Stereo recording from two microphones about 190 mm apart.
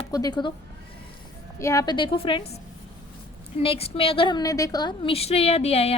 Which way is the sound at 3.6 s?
30° left (ahead or behind).